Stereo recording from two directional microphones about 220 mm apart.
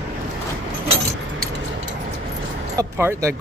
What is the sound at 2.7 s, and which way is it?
Music, 15° right (ahead or behind).